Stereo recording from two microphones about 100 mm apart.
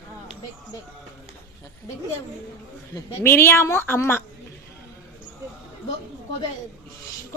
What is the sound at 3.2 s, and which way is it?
A woman's voice, 25° left (ahead or behind).